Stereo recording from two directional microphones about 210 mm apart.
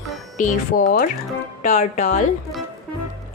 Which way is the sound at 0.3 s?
40° left (ahead or behind).